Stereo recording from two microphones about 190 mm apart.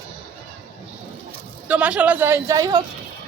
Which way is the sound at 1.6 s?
5° right (ahead or behind).